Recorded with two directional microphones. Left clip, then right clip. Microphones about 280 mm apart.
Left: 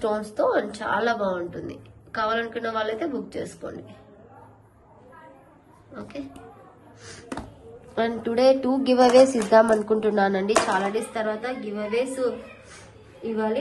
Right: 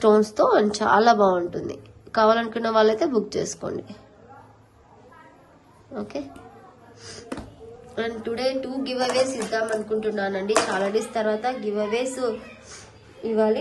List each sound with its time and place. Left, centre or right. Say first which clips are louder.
0.2 s speech: right 4 dB; right
5.9 s speech: right 5 dB; centre
7.2 s a sound: even; centre
7.9 s a woman's voice: left 3 dB; centre